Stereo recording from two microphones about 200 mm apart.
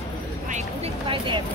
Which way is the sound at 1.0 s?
25° right (ahead or behind).